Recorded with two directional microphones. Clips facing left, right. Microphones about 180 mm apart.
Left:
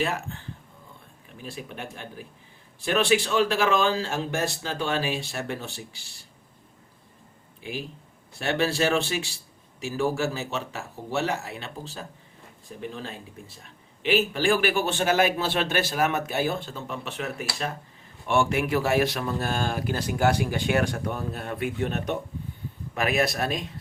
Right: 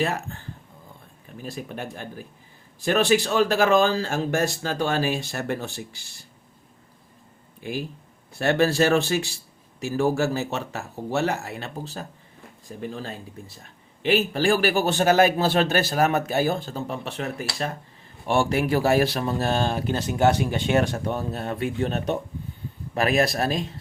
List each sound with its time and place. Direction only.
1.4 s a man's voice: 40° right (ahead or behind)
7.6 s a man's voice: 45° right (ahead or behind)